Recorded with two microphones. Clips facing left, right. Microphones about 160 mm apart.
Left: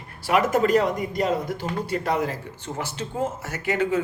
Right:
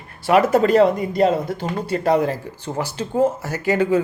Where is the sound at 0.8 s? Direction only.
30° right (ahead or behind).